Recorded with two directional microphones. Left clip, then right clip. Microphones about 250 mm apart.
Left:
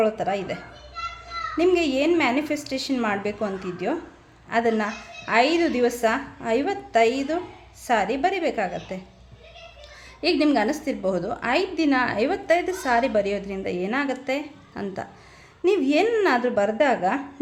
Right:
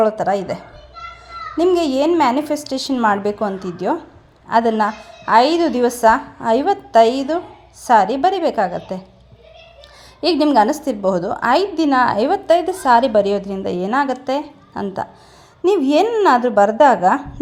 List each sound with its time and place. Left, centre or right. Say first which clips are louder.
0.0 s a woman's voice: right 7 dB; centre
10.4 s a woman's voice: right 11 dB; centre